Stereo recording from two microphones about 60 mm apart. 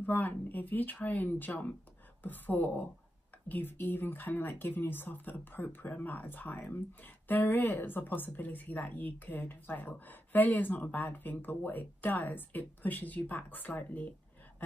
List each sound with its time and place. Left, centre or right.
0.0 s speech: left